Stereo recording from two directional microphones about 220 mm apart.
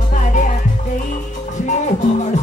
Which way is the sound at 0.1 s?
35° left (ahead or behind).